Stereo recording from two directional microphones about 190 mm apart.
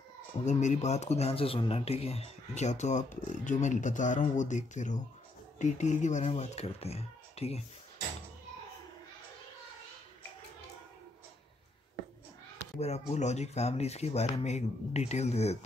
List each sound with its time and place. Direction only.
0.5 s speech: 40° left (ahead or behind)
12.7 s speech: 35° left (ahead or behind)